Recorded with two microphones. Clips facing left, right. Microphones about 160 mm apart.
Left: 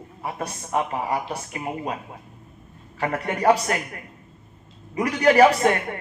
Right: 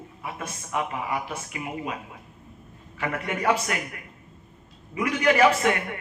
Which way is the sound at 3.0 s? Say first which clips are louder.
Left 5 dB; 35° left (ahead or behind).